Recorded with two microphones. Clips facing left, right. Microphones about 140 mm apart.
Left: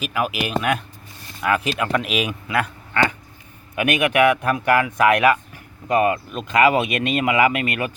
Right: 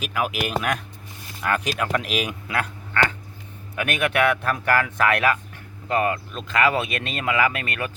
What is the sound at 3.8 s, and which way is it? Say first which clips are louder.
Speech: left 4 dB; 15° left (ahead or behind).